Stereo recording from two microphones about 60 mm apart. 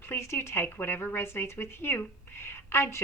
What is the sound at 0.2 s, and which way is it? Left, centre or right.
A woman's voice, left.